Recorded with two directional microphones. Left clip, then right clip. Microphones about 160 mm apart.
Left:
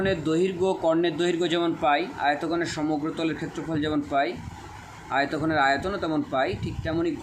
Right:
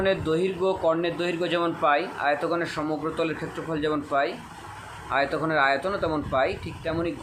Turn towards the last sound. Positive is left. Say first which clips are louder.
# left 1 dB
turn(degrees=20)  # may be behind; listen again after turning